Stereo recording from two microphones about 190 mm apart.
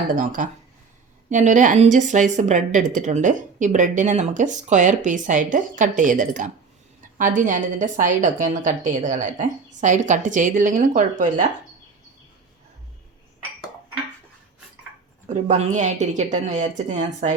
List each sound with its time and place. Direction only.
0.2 s a woman's voice: 45° right (ahead or behind)
15.3 s a woman's voice: 40° right (ahead or behind)